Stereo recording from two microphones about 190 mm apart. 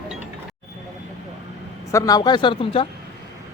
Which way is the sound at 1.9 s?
20° left (ahead or behind).